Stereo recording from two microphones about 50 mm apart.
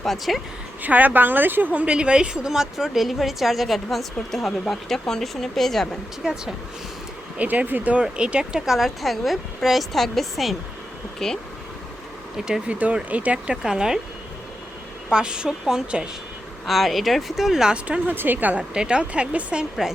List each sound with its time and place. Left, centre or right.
0.0 s a woman's voice: centre
0.8 s a woman's voice: right
1.7 s a woman's voice: right; by 5.9 s centre
7.3 s a woman's voice: right; by 11.4 s centre
12.4 s a woman's voice: centre
12.6 s speech: right
13.6 s a woman's voice: centre
15.1 s a woman's voice: centre
16.6 s a woman's voice: centre
18.1 s a woman's voice: right
18.7 s speech: centre